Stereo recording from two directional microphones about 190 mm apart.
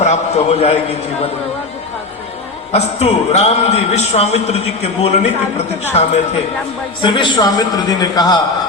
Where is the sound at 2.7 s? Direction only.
35° left (ahead or behind).